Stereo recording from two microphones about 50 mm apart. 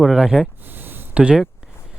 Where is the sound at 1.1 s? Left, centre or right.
Right.